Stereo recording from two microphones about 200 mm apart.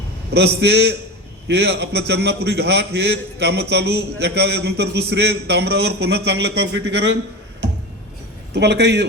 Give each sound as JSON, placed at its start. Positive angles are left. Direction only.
{"t": 0.3, "sound": "a man's voice", "side_deg": -55}
{"t": 8.5, "sound": "a man's voice", "side_deg": -60}